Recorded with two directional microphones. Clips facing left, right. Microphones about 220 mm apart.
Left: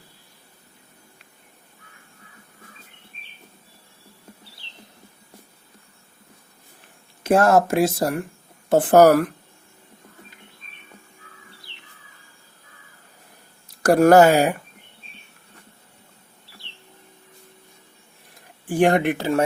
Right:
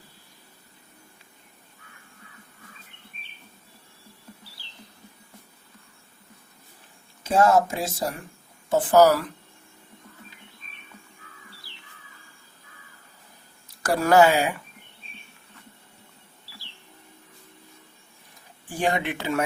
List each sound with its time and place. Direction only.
7.3 s speech: 65° left (ahead or behind)
13.8 s speech: 50° left (ahead or behind)
18.7 s speech: 60° left (ahead or behind)
19.0 s speech: 40° left (ahead or behind)